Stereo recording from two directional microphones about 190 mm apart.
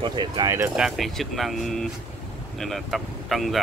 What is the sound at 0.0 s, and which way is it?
Speech, 25° right (ahead or behind).